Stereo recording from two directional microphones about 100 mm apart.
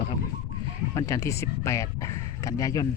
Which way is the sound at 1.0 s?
30° left (ahead or behind).